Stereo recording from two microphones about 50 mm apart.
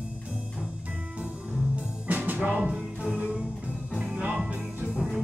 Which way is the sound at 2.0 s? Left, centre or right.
Right.